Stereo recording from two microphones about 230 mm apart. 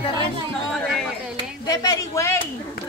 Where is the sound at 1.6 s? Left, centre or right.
Centre.